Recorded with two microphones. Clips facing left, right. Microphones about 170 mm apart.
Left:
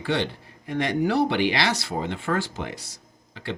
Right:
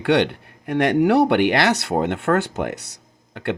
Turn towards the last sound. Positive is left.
turn(degrees=-60)  # may be behind; listen again after turning